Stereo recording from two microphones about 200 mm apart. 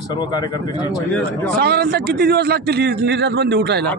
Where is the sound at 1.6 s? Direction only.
55° right (ahead or behind).